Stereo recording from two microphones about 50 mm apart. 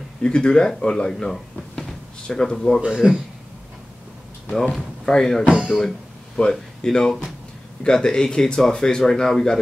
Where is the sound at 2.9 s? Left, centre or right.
Centre.